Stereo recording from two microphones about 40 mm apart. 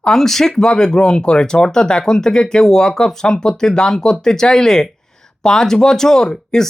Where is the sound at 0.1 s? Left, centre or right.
Centre.